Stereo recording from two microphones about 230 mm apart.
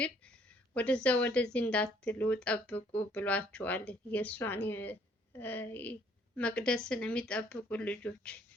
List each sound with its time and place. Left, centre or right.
0.7 s a woman's voice: centre